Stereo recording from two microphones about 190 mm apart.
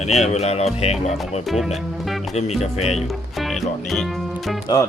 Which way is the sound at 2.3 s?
35° left (ahead or behind).